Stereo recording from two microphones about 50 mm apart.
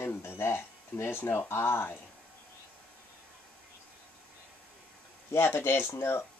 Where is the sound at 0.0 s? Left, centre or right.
Left.